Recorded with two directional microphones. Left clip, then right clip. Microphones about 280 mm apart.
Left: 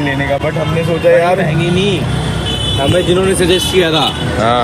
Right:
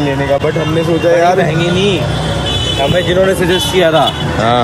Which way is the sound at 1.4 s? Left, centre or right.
Right.